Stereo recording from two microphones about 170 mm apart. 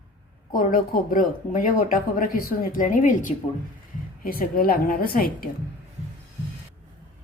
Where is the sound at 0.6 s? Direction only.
55° left (ahead or behind).